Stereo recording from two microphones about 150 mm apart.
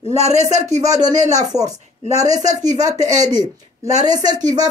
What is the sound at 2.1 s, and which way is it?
Speech, 50° right (ahead or behind).